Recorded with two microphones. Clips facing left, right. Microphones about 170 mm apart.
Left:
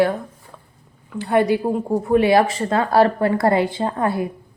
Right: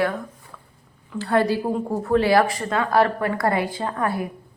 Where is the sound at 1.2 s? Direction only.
20° left (ahead or behind).